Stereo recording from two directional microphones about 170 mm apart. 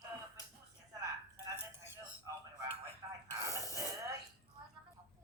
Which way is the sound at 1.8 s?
15° right (ahead or behind).